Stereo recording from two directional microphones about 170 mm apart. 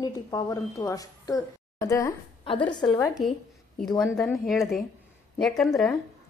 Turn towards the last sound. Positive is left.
turn(degrees=0)  # may be behind; listen again after turning